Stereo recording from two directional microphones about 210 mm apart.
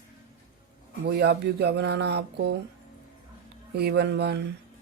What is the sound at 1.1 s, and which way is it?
Speech, 50° right (ahead or behind).